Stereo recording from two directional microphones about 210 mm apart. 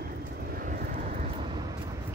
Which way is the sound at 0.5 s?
45° right (ahead or behind).